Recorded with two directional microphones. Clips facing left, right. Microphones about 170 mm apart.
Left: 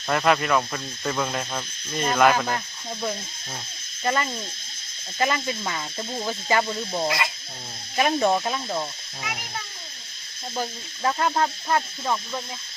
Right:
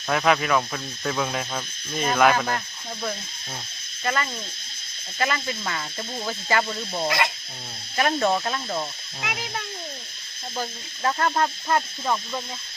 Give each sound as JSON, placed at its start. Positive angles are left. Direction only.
{"t": 0.1, "sound": "speech", "side_deg": 0}
{"t": 4.0, "sound": "speech", "side_deg": 25}
{"t": 7.9, "sound": "speech", "side_deg": 15}
{"t": 9.2, "sound": "speech", "side_deg": -70}
{"t": 10.6, "sound": "speech", "side_deg": 10}